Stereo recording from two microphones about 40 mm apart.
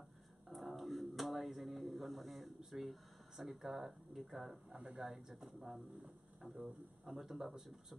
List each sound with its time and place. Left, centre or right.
0.5 s a sound: centre
4.2 s speech: centre
4.6 s speech: right
5.4 s speech: centre